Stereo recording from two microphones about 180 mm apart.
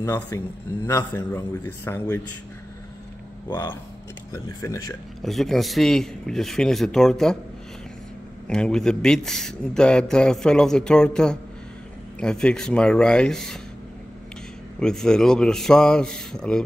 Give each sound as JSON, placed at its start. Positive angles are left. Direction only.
{"t": 0.0, "sound": "a man's voice", "side_deg": 15}
{"t": 4.3, "sound": "a man's voice", "side_deg": 15}
{"t": 5.2, "sound": "a man's voice", "side_deg": 0}
{"t": 8.5, "sound": "a man's voice", "side_deg": 5}
{"t": 14.8, "sound": "a man's voice", "side_deg": 5}